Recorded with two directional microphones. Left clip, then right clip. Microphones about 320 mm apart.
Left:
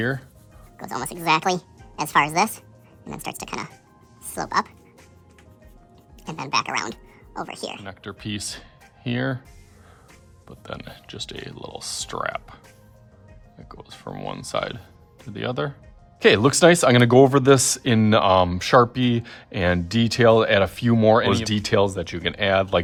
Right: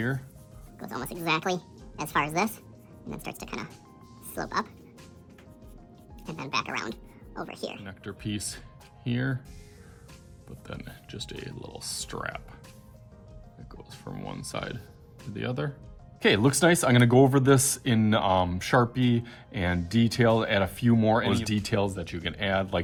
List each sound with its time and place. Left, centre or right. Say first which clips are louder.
0.8 s speech: left 6 dB; centre
6.2 s speech: left 7 dB; centre
10.6 s speech: left 7 dB; centre
13.7 s speech: left 7 dB; centre